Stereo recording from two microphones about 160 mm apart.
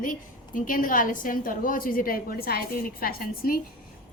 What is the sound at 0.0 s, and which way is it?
A woman's voice, 55° left (ahead or behind).